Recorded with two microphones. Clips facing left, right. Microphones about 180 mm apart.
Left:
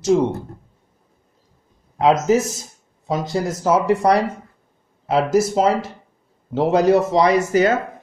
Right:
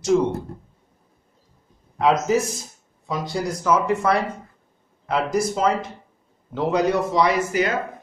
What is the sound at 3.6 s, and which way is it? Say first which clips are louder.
Speech: left 4 dB; 35° left (ahead or behind).